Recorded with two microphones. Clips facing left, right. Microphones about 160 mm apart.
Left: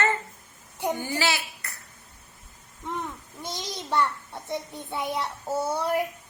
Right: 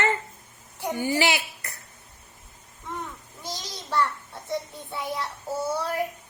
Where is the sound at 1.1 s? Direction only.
15° right (ahead or behind).